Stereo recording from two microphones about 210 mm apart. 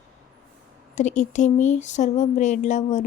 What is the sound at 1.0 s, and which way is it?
Speech, 35° left (ahead or behind).